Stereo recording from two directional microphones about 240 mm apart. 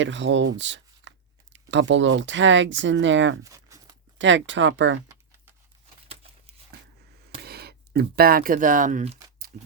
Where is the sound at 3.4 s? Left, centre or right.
Centre.